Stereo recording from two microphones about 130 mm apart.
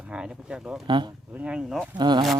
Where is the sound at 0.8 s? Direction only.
40° right (ahead or behind).